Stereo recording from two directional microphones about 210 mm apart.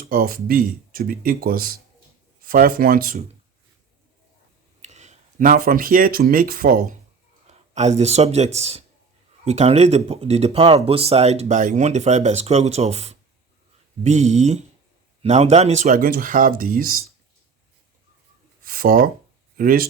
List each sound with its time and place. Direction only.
0.0 s speech: 45° right (ahead or behind)
4.8 s speech: 35° right (ahead or behind)
7.4 s speech: 30° right (ahead or behind)
18.6 s speech: 45° right (ahead or behind)